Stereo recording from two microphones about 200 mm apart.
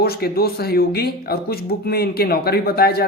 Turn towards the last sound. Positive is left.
turn(degrees=50)  # may be behind; listen again after turning